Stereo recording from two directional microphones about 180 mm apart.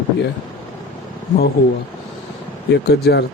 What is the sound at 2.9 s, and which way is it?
Speech, 70° left (ahead or behind).